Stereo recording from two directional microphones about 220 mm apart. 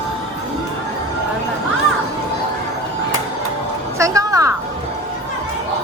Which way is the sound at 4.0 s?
15° right (ahead or behind).